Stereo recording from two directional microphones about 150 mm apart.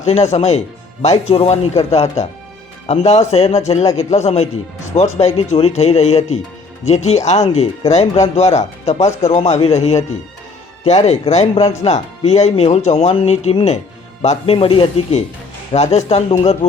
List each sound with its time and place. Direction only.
0.0 s speech: 50° left (ahead or behind)
15.7 s speech: 50° left (ahead or behind)